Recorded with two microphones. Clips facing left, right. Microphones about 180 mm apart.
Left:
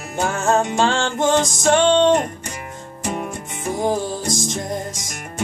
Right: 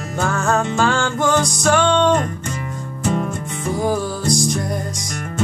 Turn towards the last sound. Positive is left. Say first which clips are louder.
# right 4 dB
turn(degrees=20)  # may be behind; listen again after turning